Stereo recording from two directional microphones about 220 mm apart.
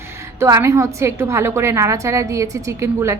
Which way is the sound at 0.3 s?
15° right (ahead or behind).